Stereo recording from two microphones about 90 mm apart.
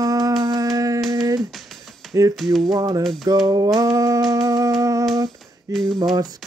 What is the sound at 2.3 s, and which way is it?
Speech, centre (ahead or behind).